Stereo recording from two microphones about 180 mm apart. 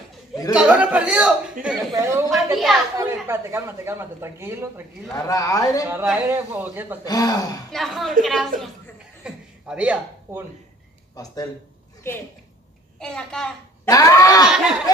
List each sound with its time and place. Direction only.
0.6 s a man's voice: 5° right (ahead or behind)
1.9 s speech: 15° right (ahead or behind)
2.5 s a man's voice: centre (ahead or behind)
3.0 s speech: 15° right (ahead or behind)
5.1 s speech: 20° left (ahead or behind)
6.1 s speech: 15° right (ahead or behind)
7.1 s speech: 20° left (ahead or behind)
7.7 s a man's voice: centre (ahead or behind)
9.2 s a sound: 5° right (ahead or behind)
11.2 s speech: 20° left (ahead or behind)
13.0 s a man's voice: 5° left (ahead or behind)
13.8 s speech: 20° left (ahead or behind)
14.4 s a man's voice: 5° right (ahead or behind)